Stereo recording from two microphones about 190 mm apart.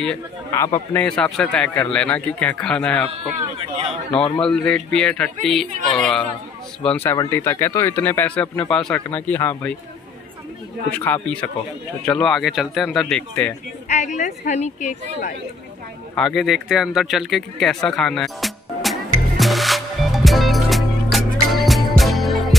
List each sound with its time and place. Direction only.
0.5 s speech: 15° left (ahead or behind)
0.9 s speech: 5° left (ahead or behind)
4.4 s speech: 5° left (ahead or behind)
12.0 s speech: 5° left (ahead or behind)
13.8 s a woman's voice: 40° left (ahead or behind)
16.2 s a sound: centre (ahead or behind)